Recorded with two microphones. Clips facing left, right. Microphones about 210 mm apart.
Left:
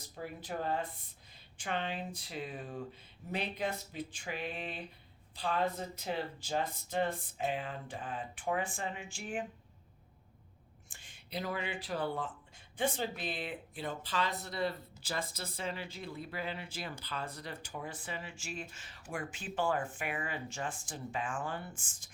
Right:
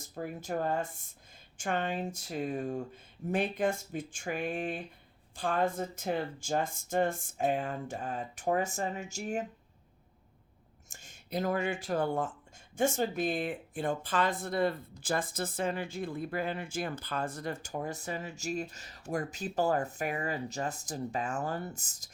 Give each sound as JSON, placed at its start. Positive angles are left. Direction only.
{"t": 0.0, "sound": "speech", "side_deg": -50}
{"t": 10.8, "sound": "speech", "side_deg": -45}